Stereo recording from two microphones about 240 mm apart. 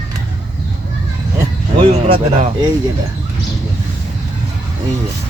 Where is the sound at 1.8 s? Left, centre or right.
Right.